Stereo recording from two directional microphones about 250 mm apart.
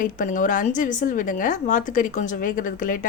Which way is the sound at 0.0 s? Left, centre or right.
Left.